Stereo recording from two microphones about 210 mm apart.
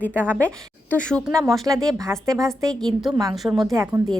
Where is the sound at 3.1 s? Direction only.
15° right (ahead or behind).